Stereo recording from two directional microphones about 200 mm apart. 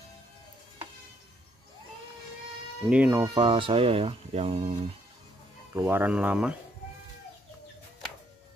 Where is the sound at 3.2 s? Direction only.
20° right (ahead or behind).